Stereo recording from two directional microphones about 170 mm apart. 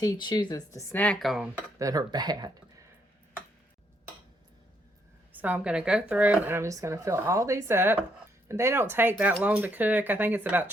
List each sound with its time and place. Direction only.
0.0 s speech: 20° left (ahead or behind); by 1.6 s centre (ahead or behind)
1.8 s speech: 20° right (ahead or behind)
5.3 s speech: 10° right (ahead or behind)